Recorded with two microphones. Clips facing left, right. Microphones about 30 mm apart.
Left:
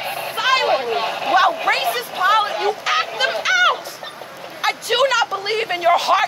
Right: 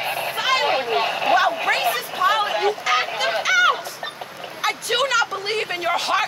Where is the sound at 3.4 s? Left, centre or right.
Left.